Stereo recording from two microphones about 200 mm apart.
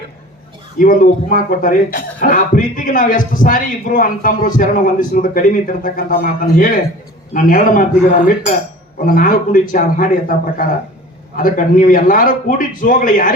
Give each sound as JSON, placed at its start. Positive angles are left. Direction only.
{"t": 0.8, "sound": "speech", "side_deg": 45}
{"t": 9.0, "sound": "speech", "side_deg": 45}